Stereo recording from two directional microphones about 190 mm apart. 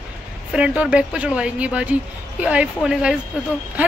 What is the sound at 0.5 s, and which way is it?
Speech, 5° right (ahead or behind).